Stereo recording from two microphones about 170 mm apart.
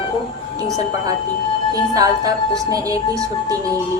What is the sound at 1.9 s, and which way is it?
A woman's voice, 20° right (ahead or behind).